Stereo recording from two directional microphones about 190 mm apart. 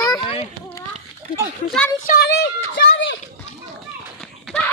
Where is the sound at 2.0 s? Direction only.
50° left (ahead or behind); by 3.1 s 70° left (ahead or behind).